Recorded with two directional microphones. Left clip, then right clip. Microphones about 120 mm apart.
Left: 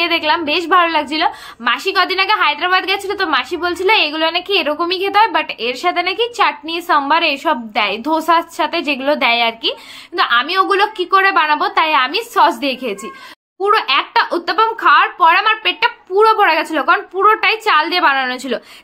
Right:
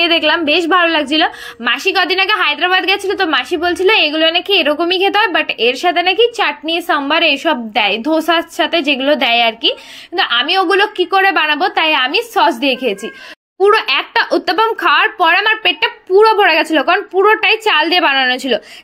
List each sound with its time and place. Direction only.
0.0 s a woman's voice: 35° right (ahead or behind)
13.6 s speech: 50° right (ahead or behind)
14.1 s a woman's voice: 40° right (ahead or behind); by 18.6 s 25° right (ahead or behind)